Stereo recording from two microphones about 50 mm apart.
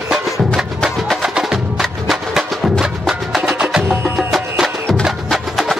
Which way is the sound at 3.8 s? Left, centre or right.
Right.